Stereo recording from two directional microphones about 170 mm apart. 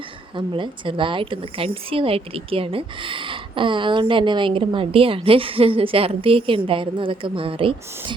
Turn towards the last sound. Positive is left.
turn(degrees=-30)  # may be behind; listen again after turning